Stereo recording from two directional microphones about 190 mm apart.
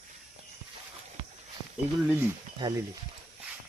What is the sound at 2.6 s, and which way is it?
Speech, 20° right (ahead or behind).